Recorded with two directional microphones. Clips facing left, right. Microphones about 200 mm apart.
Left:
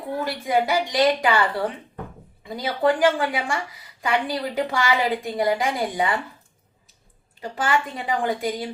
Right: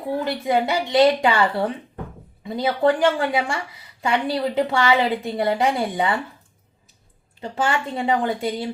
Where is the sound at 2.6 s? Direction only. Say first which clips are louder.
Right 2 dB; 25° right (ahead or behind).